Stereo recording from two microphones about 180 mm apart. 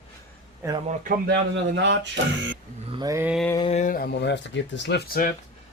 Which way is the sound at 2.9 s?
20° right (ahead or behind).